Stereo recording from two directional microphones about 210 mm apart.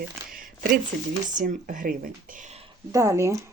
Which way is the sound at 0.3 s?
40° right (ahead or behind).